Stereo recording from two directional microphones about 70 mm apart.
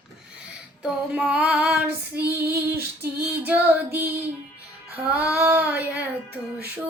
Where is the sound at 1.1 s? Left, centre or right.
Centre.